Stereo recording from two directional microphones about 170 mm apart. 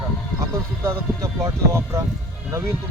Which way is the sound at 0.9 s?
20° right (ahead or behind).